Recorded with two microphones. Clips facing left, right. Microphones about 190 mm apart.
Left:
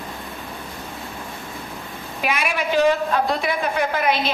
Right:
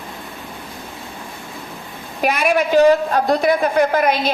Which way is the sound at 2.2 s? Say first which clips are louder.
Right 7 dB; 45° right (ahead or behind).